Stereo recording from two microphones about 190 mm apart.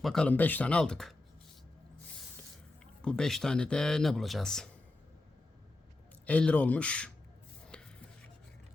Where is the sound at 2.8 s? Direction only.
5° left (ahead or behind).